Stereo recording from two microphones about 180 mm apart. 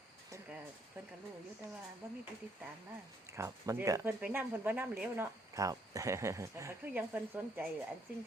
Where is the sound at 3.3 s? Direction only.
15° right (ahead or behind).